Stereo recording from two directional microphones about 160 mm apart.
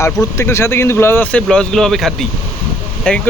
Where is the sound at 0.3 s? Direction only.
15° left (ahead or behind).